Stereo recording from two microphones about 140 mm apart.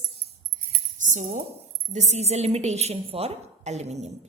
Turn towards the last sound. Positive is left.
turn(degrees=-50)  # may be behind; listen again after turning